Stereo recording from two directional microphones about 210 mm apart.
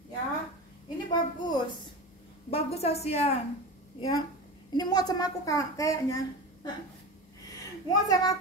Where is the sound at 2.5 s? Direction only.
30° left (ahead or behind).